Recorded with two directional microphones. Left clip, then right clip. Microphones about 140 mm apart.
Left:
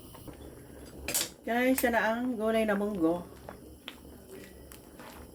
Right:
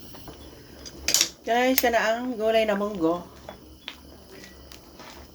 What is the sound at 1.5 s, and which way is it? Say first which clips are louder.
Speech: right 5 dB; 10° right (ahead or behind).